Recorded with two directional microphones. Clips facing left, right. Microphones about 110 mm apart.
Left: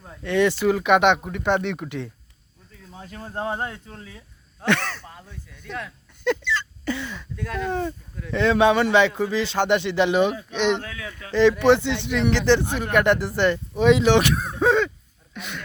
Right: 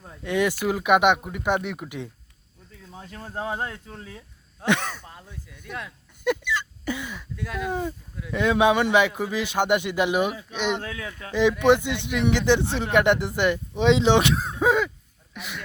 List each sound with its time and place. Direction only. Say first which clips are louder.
0.2 s speech: left 3 dB; 10° right (ahead or behind)
3.0 s speech: left 2 dB; centre (ahead or behind)
4.6 s speech: left 1 dB; 15° right (ahead or behind)
10.8 s speech: right 1 dB; 25° right (ahead or behind)
14.5 s throat clearing: left 3 dB; 10° right (ahead or behind)
15.4 s speech: left 2 dB; centre (ahead or behind)